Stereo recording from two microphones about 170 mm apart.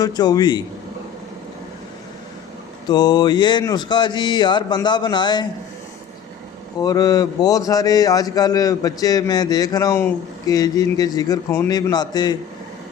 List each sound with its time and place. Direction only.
0.0 s a man's voice: 25° left (ahead or behind)
2.9 s a man's voice: 25° left (ahead or behind)
6.7 s a man's voice: 20° left (ahead or behind)